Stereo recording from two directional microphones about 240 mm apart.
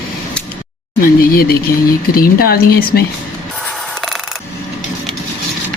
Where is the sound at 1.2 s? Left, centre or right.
Left.